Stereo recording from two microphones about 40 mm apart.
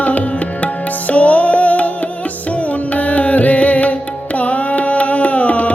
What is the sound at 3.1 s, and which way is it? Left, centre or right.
Music, left.